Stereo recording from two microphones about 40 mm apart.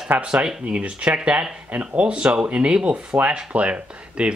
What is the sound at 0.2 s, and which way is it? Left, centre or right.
Speech, right.